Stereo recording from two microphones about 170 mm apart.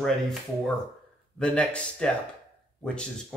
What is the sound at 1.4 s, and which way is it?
Speech, 5° left (ahead or behind).